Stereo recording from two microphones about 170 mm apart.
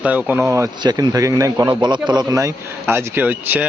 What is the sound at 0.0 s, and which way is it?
A man's voice, 10° right (ahead or behind).